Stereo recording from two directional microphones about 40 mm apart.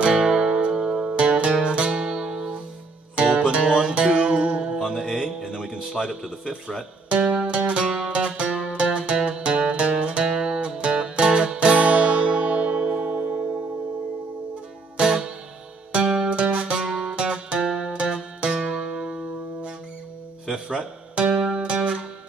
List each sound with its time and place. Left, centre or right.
0.1 s music: centre
4.7 s music: centre
5.2 s music: centre
5.9 s speech: centre
7.1 s music: right
15.0 s music: right
16.8 s music: centre
20.6 s music: right